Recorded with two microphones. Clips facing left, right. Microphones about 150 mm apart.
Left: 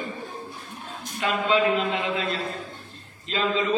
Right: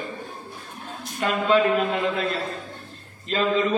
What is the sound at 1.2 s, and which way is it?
A man's voice, 45° right (ahead or behind).